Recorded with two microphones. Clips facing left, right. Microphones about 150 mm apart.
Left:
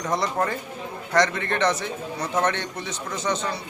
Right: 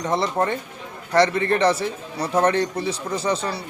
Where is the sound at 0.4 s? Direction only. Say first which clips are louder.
Right 3 dB; 20° right (ahead or behind).